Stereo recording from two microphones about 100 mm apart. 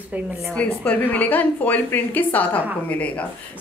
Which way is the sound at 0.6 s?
15° left (ahead or behind).